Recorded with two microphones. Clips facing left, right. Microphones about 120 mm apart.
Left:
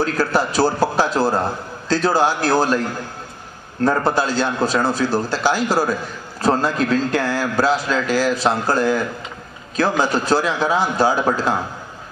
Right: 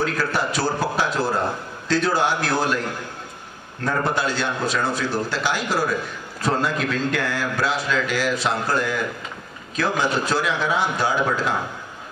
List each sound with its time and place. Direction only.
0.0 s a man's voice: 35° left (ahead or behind)
3.8 s speech: 35° left (ahead or behind)